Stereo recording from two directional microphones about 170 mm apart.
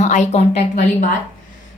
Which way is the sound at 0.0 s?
45° left (ahead or behind).